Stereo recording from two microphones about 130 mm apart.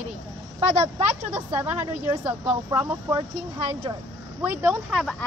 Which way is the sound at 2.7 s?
20° right (ahead or behind).